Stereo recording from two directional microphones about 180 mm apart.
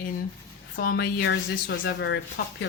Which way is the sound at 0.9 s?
80° left.